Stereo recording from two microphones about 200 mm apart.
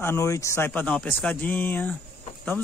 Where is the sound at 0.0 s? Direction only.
15° left (ahead or behind).